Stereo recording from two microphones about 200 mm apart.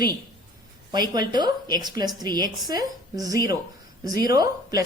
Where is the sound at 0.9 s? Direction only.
20° right (ahead or behind).